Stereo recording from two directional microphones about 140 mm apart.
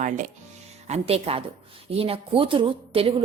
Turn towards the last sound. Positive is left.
turn(degrees=-40)  # may be behind; listen again after turning